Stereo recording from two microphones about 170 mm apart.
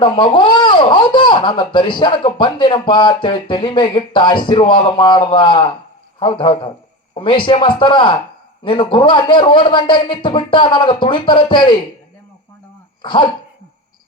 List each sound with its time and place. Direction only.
0.0 s a man's voice: 30° left (ahead or behind)
13.0 s speech: 30° left (ahead or behind)